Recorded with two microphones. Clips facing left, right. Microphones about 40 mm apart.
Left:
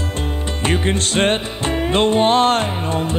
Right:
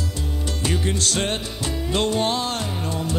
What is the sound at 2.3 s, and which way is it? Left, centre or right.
Music, left.